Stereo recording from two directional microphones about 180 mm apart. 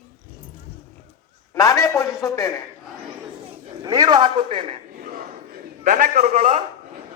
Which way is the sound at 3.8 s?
20° right (ahead or behind).